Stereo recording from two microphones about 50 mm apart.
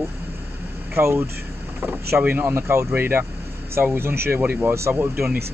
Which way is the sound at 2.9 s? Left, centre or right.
Right.